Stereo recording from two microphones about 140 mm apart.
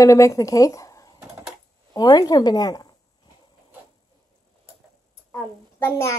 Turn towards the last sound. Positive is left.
turn(degrees=20)  # may be behind; listen again after turning